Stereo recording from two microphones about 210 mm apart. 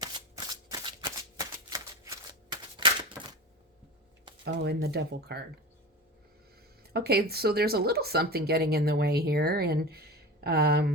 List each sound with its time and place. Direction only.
0.0 s shuffling cards: 20° right (ahead or behind)
4.4 s speech: 50° right (ahead or behind)
6.9 s speech: 50° right (ahead or behind)